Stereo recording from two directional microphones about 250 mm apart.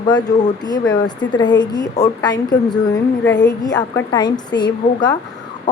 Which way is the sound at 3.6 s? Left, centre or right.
Centre.